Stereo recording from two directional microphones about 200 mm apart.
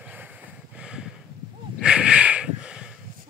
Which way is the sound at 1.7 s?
5° right (ahead or behind).